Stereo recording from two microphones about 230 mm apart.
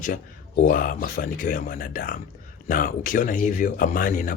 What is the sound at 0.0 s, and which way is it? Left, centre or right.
Speech, left.